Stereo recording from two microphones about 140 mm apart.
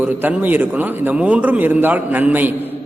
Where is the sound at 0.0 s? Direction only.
10° right (ahead or behind).